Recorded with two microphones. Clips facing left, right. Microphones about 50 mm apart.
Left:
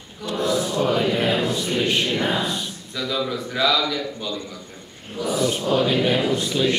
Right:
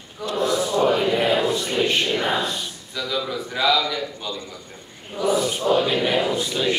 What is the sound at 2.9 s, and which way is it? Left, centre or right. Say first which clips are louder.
Speech: left 1 dB; centre.